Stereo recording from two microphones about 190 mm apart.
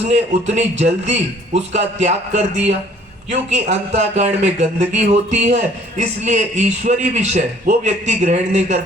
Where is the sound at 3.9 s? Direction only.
35° right (ahead or behind).